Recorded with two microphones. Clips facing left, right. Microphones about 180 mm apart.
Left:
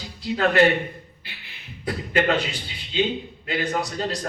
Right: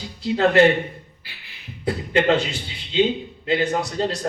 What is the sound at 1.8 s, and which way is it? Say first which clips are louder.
A man's voice: right 3 dB; 25° right (ahead or behind).